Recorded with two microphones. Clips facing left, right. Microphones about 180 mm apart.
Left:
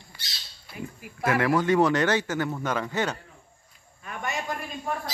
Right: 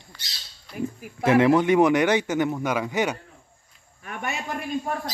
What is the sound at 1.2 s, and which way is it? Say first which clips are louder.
A man's voice: right 5 dB; 20° right (ahead or behind).